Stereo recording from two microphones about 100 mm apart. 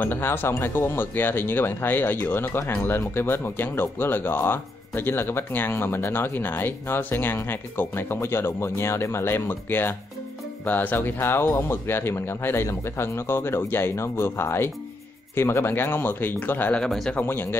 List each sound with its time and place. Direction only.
0.0 s speech: 20° left (ahead or behind)
16.8 s a man's voice: 5° left (ahead or behind)
17.2 s speech: 20° left (ahead or behind)